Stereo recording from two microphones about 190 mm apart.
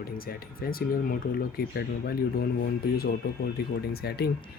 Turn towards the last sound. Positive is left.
turn(degrees=55)  # may be behind; listen again after turning